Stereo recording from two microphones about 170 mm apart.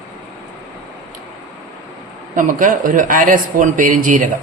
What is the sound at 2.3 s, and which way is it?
Speech, 50° right (ahead or behind).